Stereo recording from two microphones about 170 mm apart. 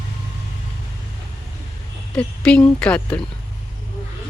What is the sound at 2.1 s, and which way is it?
Speech, 5° left (ahead or behind).